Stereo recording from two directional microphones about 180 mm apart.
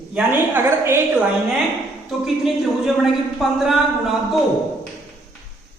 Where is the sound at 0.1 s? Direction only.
10° right (ahead or behind).